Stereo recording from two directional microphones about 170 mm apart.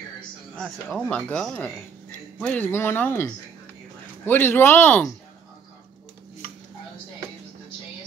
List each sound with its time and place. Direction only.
0.6 s speech: 5° left (ahead or behind)
4.3 s speech: 10° left (ahead or behind)